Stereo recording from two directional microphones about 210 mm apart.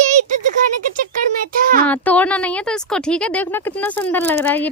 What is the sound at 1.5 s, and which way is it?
Speech, 40° right (ahead or behind).